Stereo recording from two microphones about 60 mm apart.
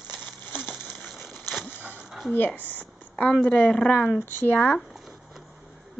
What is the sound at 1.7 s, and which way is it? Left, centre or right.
Music, left.